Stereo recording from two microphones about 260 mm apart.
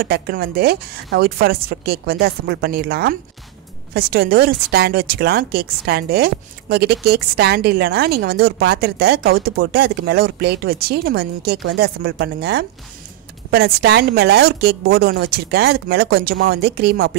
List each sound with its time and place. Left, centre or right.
0.0 s speech: right